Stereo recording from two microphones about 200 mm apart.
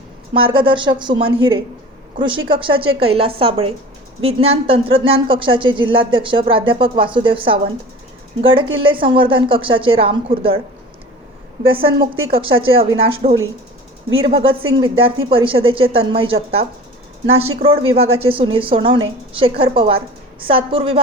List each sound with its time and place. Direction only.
0.3 s speech: 25° right (ahead or behind)
12.4 s speech: 25° right (ahead or behind)